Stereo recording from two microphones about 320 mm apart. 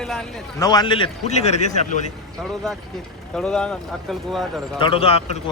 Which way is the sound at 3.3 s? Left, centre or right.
Centre.